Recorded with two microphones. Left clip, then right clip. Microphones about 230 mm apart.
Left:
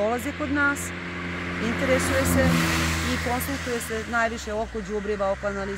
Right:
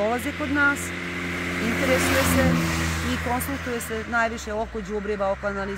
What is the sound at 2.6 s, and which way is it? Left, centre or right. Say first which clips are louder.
Speech: left 2 dB; left.